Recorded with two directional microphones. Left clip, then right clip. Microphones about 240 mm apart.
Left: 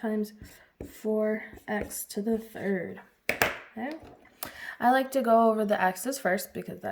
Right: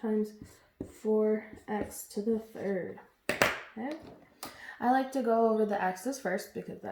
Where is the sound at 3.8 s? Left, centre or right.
Left.